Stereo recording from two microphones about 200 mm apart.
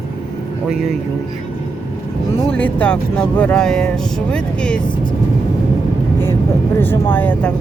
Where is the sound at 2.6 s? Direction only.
5° left (ahead or behind).